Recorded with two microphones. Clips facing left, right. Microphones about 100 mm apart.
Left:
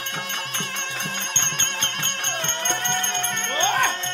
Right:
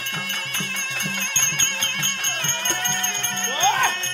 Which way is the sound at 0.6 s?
20° left (ahead or behind).